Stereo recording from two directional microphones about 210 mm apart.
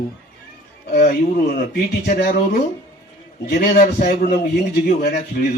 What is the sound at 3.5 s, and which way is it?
A man's voice, 40° left (ahead or behind).